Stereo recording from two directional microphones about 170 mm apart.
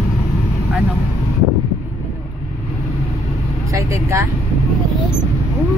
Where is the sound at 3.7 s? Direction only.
20° right (ahead or behind).